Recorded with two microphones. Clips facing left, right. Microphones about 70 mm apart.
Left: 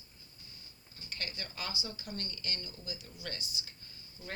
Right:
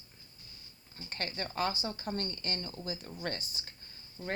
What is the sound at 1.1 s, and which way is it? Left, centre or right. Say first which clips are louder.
Speech: right 5 dB; right.